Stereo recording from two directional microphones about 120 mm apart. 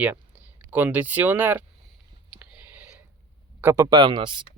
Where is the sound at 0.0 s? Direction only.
15° right (ahead or behind).